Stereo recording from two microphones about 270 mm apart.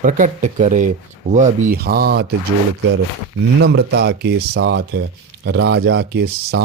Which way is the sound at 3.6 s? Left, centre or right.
Right.